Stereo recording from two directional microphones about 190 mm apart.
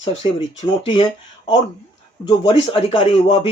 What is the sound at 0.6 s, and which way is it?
Speech, 25° left (ahead or behind).